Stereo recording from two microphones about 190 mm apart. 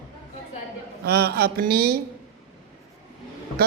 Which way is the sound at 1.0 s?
55° right (ahead or behind).